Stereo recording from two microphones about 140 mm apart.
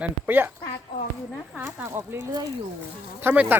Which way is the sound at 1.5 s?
15° right (ahead or behind).